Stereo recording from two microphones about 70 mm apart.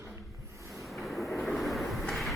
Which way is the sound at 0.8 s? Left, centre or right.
Centre.